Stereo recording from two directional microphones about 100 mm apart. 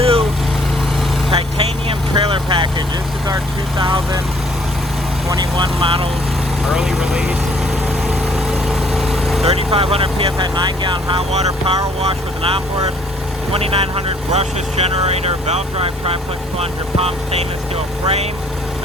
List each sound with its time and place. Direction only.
0.0 s lawn mower: 75° right (ahead or behind)
1.3 s vehicle: 65° right (ahead or behind)
3.8 s speech: 55° right (ahead or behind)
5.3 s speech: 50° right (ahead or behind)
6.7 s speech: 5° right (ahead or behind)
8.0 s vehicle: 5° right (ahead or behind)
9.4 s speech: 80° right; by 11.2 s 50° right (ahead or behind)
11.3 s speech: 90° right
12.0 s speech: 70° right (ahead or behind); by 18.3 s 90° right